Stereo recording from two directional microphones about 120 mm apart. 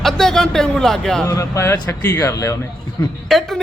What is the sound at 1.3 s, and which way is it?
Speech, 25° left (ahead or behind).